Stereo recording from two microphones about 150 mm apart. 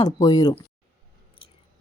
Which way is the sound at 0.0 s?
25° left (ahead or behind).